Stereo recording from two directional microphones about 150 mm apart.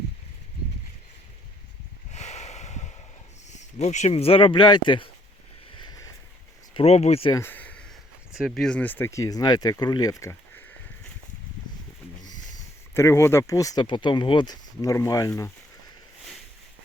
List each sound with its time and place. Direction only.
2.1 s a sound: 50° left (ahead or behind)
3.5 s speech: 50° left (ahead or behind); by 5.0 s 30° left (ahead or behind)
6.7 s speech: 45° left (ahead or behind)
7.3 s a sound: 20° left (ahead or behind)
8.3 s speech: 5° right (ahead or behind); by 10.6 s 20° left (ahead or behind)
12.9 s speech: 15° left (ahead or behind)